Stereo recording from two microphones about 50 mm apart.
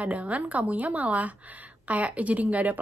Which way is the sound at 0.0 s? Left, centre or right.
Right.